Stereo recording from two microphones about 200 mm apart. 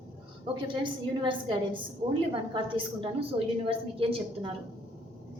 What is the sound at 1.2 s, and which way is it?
A woman's voice, 25° right (ahead or behind).